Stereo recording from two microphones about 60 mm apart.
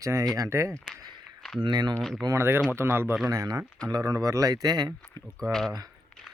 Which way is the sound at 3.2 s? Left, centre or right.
Right.